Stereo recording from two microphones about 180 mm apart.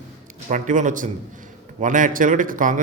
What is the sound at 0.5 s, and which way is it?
Speech, 45° right (ahead or behind).